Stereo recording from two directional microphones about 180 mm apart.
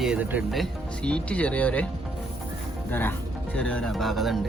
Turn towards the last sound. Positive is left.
turn(degrees=0)  # may be behind; listen again after turning